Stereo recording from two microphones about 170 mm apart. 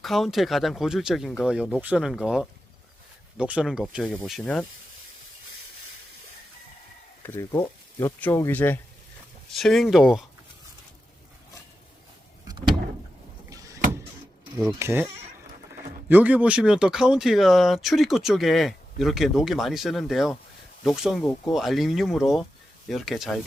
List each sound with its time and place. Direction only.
0.0 s speech: centre (ahead or behind)
7.2 s speech: 15° left (ahead or behind)
13.5 s vehicle: 20° right (ahead or behind)
14.7 s speech: 15° right (ahead or behind)